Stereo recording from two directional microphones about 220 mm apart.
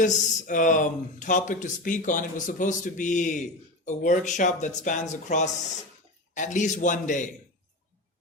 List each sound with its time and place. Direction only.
0.0 s speech: 35° left (ahead or behind)